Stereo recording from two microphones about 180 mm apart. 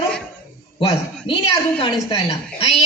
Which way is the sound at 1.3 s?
30° left (ahead or behind).